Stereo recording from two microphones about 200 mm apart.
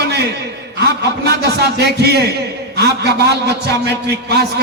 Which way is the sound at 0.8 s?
55° right (ahead or behind).